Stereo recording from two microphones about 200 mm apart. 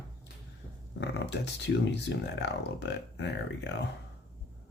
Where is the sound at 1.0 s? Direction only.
60° left (ahead or behind).